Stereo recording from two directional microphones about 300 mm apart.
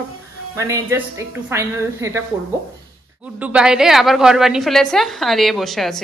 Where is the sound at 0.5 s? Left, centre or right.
Centre.